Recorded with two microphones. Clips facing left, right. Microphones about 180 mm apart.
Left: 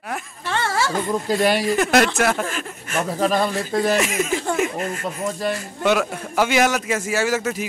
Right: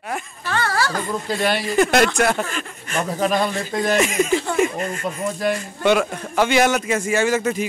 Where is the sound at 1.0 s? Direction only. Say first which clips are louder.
Left 3 dB; 5° left (ahead or behind).